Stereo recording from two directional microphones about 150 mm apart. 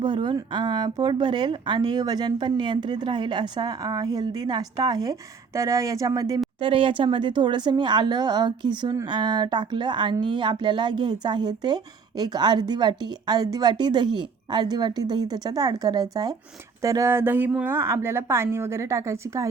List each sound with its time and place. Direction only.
0.0 s speech: 30° right (ahead or behind)
6.6 s a woman's voice: 35° right (ahead or behind); by 19.5 s 20° right (ahead or behind)